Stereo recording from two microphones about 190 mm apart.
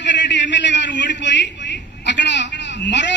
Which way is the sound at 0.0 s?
70° left (ahead or behind).